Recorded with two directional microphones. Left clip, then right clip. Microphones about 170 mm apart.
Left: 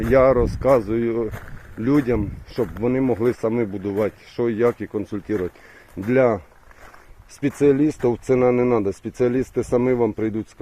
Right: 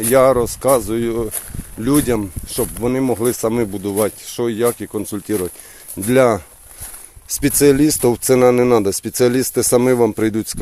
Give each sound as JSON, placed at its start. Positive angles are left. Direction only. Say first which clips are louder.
{"t": 0.1, "sound": "speech", "louder": "right 3 dB", "side_deg": -20}
{"t": 4.9, "sound": "speech", "louder": "right 3 dB", "side_deg": -30}
{"t": 6.1, "sound": "speech", "louder": "right 4 dB", "side_deg": -45}
{"t": 7.4, "sound": "speech", "louder": "right 5 dB", "side_deg": -40}